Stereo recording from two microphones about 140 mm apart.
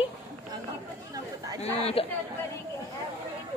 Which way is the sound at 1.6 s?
45° left (ahead or behind).